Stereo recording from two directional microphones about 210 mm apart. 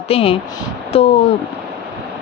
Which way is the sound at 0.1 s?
25° left (ahead or behind).